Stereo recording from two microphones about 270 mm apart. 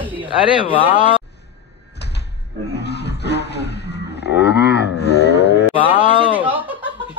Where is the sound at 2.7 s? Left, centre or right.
Left.